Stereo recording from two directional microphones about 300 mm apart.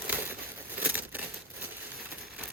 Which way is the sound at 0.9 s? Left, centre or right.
Centre.